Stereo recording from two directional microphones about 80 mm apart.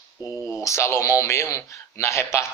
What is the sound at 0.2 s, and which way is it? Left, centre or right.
Speech, left.